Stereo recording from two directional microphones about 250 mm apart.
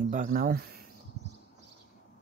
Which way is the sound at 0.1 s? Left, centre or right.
Right.